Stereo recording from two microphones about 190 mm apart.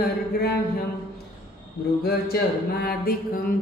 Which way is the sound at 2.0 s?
55° left (ahead or behind).